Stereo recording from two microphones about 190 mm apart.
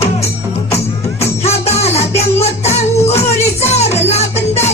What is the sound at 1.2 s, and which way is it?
Music, 35° left (ahead or behind).